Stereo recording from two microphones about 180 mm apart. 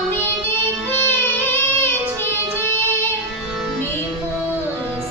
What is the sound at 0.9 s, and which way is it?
Child singing, 10° left (ahead or behind).